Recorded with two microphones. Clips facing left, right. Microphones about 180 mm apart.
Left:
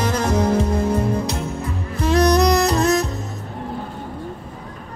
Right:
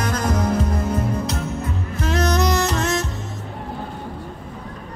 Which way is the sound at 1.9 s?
35° left (ahead or behind).